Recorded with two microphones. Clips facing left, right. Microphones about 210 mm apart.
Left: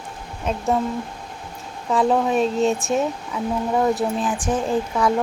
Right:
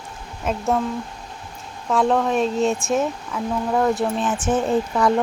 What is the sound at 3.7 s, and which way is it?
Speech, 15° left (ahead or behind).